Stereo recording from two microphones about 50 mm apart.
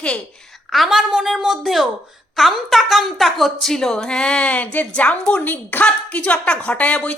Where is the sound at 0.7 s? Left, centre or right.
Centre.